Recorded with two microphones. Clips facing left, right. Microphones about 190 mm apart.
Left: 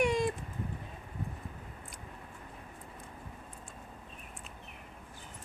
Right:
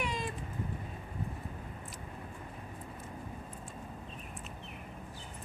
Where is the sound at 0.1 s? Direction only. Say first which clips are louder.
Left 8 dB; 50° left (ahead or behind).